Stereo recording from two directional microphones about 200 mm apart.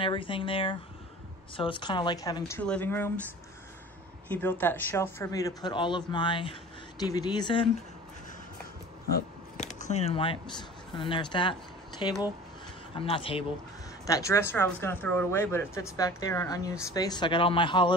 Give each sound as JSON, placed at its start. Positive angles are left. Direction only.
{"t": 0.0, "sound": "speech", "side_deg": 25}
{"t": 4.3, "sound": "speech", "side_deg": 10}
{"t": 9.8, "sound": "speech", "side_deg": 35}
{"t": 14.0, "sound": "speech", "side_deg": 15}